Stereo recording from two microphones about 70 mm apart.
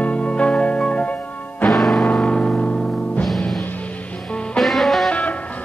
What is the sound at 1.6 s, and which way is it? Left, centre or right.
Music, centre.